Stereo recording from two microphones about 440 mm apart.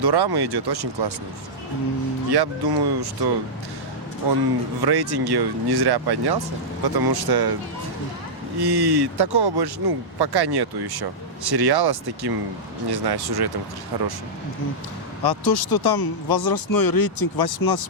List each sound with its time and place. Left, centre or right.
0.0 s speech: right
2.3 s speech: right
4.2 s speech: right
8.5 s speech: right
15.2 s speech: left